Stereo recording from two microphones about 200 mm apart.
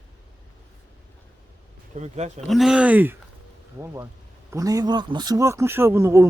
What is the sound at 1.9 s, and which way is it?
Speech, 35° right (ahead or behind).